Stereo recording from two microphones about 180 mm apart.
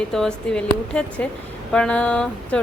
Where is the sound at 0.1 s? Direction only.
5° left (ahead or behind).